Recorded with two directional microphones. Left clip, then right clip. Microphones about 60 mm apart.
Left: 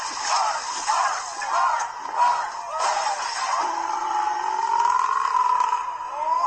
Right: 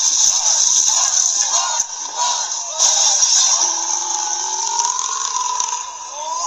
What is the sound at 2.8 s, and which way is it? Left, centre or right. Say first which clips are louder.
Music: right 7 dB; left.